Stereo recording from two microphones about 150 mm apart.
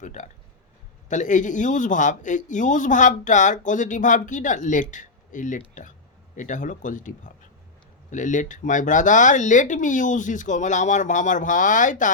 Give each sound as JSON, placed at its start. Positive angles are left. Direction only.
{"t": 0.0, "sound": "speech", "side_deg": 55}